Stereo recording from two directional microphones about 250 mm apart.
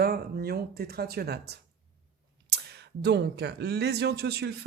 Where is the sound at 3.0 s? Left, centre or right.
Right.